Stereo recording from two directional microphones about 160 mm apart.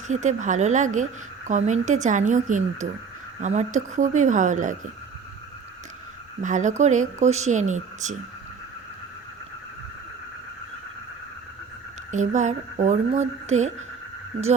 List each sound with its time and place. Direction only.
0.1 s speech: 50° right (ahead or behind)
6.4 s speech: 50° right (ahead or behind)
12.1 s speech: 50° right (ahead or behind)